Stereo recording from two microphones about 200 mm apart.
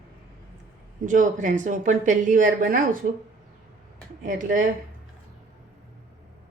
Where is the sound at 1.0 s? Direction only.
40° right (ahead or behind).